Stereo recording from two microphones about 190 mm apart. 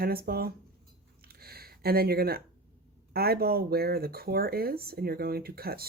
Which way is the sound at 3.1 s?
55° right (ahead or behind).